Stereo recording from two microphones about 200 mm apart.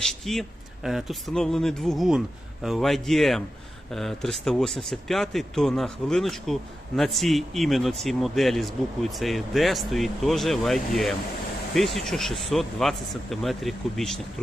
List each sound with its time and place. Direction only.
0.0 s speech: centre (ahead or behind)